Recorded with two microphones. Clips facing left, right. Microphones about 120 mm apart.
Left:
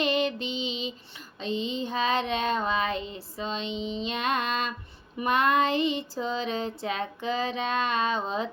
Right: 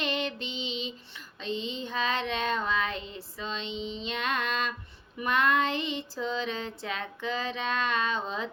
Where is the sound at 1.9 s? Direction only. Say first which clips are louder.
Left 3 dB; 15° left (ahead or behind).